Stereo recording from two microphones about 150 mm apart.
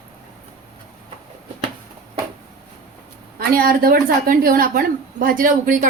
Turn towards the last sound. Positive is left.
turn(degrees=-65)  # may be behind; listen again after turning